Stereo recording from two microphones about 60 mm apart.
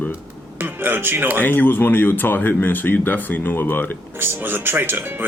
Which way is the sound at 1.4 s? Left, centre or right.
Left.